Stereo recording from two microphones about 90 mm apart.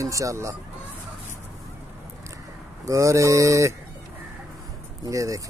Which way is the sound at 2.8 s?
35° right (ahead or behind).